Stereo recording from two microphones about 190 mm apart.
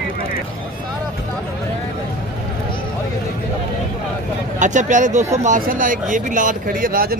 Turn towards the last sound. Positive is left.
turn(degrees=-50)  # may be behind; listen again after turning